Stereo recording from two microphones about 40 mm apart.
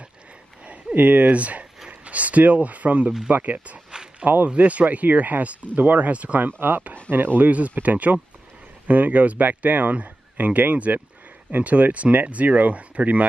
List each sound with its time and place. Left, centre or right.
0.9 s speech: right
4.2 s speech: right
4.6 s speech: right
6.4 s speech: right